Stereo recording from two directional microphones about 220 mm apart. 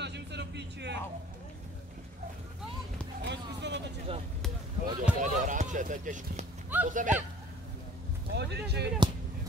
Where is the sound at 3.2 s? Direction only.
50° right (ahead or behind).